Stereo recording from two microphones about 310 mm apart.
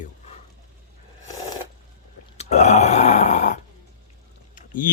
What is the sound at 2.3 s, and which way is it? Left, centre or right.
Burping, left.